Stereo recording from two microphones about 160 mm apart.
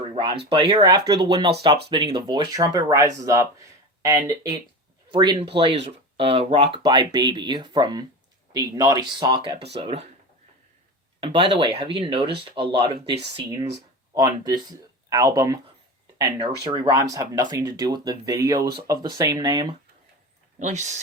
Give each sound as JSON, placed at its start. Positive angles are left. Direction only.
{"t": 0.1, "sound": "a sound", "side_deg": -35}
{"t": 0.5, "sound": "speech", "side_deg": -30}
{"t": 9.7, "sound": "speech", "side_deg": -40}
{"t": 11.2, "sound": "speech", "side_deg": -35}
{"t": 13.3, "sound": "speech", "side_deg": -20}
{"t": 16.6, "sound": "speech", "side_deg": -25}
{"t": 20.6, "sound": "speech", "side_deg": -45}